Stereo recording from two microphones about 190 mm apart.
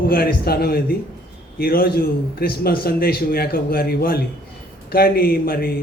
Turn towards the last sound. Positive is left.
turn(degrees=55)  # may be behind; listen again after turning